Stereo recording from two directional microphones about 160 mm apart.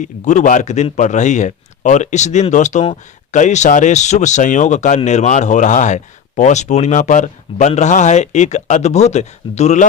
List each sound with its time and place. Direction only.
0.0 s a man's voice: 50° left (ahead or behind)